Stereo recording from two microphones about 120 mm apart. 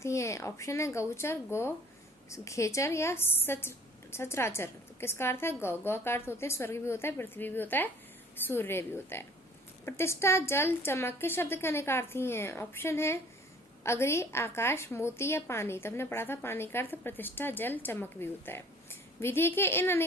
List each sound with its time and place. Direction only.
0.0 s a woman's voice: 25° left (ahead or behind)